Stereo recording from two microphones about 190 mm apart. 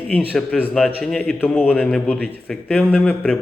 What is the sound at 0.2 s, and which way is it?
A man's voice, centre (ahead or behind).